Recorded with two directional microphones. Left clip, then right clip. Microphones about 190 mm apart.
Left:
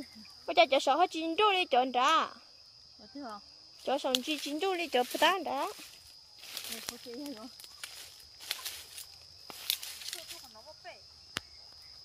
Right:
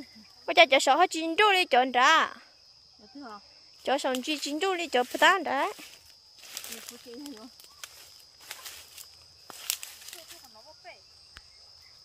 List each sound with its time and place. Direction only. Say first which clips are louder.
0.5 s speech: right 5 dB; 30° right (ahead or behind)
3.2 s speech: even; 10° left (ahead or behind)
3.8 s speech: right 3 dB; 30° right (ahead or behind)
6.7 s speech: left 1 dB; 5° left (ahead or behind)
8.5 s walk: left 5 dB; 15° left (ahead or behind)